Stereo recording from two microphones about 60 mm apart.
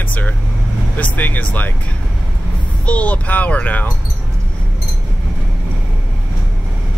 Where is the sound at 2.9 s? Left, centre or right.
Left.